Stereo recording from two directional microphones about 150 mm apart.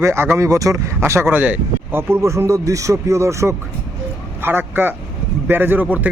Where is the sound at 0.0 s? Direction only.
15° right (ahead or behind).